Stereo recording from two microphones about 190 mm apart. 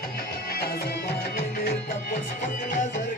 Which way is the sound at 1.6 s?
45° left (ahead or behind).